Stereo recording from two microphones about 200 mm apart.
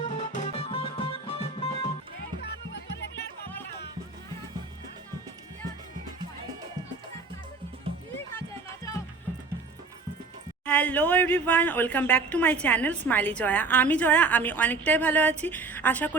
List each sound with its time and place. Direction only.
0.2 s music: 30° left (ahead or behind)
2.4 s music: 55° left (ahead or behind)
8.4 s music: 15° left (ahead or behind)
10.7 s speech: 5° left (ahead or behind)